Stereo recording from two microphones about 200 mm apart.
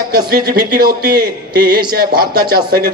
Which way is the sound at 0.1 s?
50° right (ahead or behind).